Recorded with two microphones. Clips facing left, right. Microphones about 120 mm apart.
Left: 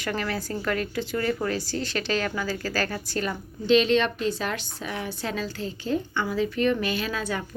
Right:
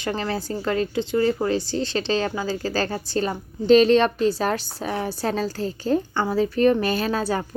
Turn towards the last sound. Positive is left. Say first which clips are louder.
# right 6 dB
turn(degrees=-35)  # may be behind; listen again after turning